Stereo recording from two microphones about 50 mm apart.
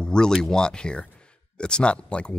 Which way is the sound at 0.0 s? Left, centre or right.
Centre.